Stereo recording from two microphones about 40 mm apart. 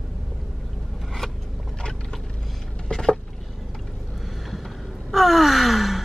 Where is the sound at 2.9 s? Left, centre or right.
Centre.